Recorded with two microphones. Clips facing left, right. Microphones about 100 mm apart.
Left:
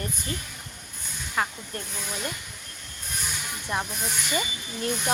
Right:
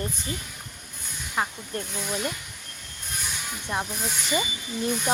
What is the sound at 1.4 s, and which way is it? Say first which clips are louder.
Speech: even; 20° right (ahead or behind).